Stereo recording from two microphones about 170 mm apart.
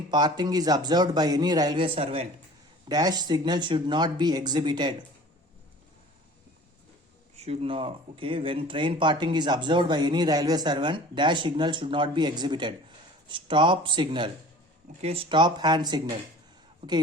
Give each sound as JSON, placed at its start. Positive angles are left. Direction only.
{"t": 0.1, "sound": "speech", "side_deg": -25}
{"t": 2.9, "sound": "speech", "side_deg": -25}
{"t": 7.3, "sound": "speech", "side_deg": -35}